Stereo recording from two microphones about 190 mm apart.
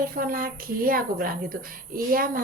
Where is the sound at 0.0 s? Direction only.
50° right (ahead or behind).